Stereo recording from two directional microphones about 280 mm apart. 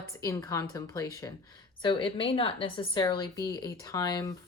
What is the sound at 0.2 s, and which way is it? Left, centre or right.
A woman's voice, centre.